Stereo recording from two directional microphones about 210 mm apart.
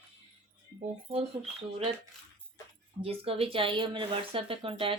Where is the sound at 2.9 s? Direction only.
25° right (ahead or behind).